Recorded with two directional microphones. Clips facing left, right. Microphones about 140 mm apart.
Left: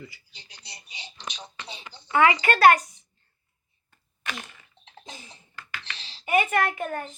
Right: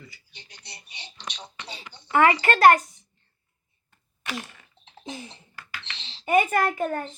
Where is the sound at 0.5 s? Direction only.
Centre (ahead or behind).